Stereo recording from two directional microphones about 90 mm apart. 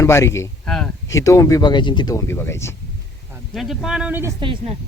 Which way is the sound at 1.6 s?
55° left (ahead or behind).